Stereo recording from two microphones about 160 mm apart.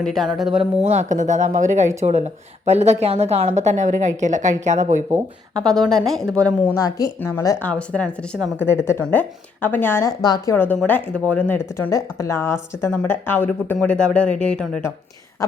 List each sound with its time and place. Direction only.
0.0 s a woman's voice: centre (ahead or behind)
0.5 s a woman's voice: 40° right (ahead or behind)
5.5 s a woman's voice: 5° left (ahead or behind)
6.7 s speech: 20° left (ahead or behind)
10.2 s speech: 25° left (ahead or behind); by 14.8 s 5° left (ahead or behind)